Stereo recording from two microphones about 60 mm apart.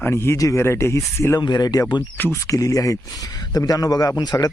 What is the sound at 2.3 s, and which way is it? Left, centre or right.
Speech, left.